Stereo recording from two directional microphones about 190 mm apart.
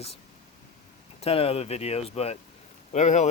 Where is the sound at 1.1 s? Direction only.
30° left (ahead or behind).